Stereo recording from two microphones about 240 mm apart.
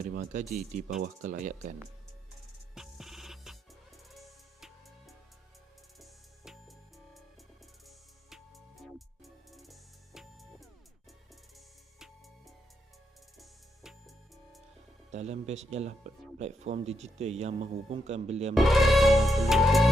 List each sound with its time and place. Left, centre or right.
0.0 s speech: right
2.7 s music: centre
13.8 s music: centre
15.1 s speech: right
18.5 s speech: centre